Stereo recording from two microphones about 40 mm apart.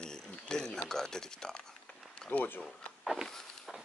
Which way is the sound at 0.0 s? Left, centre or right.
Centre.